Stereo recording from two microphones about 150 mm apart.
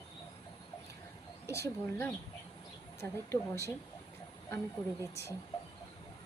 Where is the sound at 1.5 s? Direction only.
20° left (ahead or behind).